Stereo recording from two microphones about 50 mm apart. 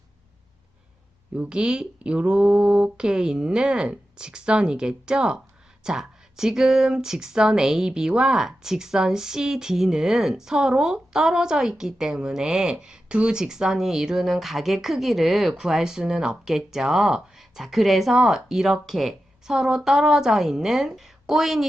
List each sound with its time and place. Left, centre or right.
1.4 s speech: centre